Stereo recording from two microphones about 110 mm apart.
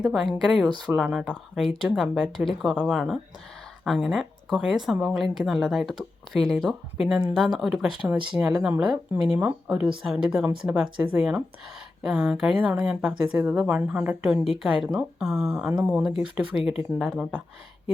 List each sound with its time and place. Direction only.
0.0 s speech: 5° right (ahead or behind); by 9.8 s 20° right (ahead or behind)
9.8 s speech: 5° right (ahead or behind)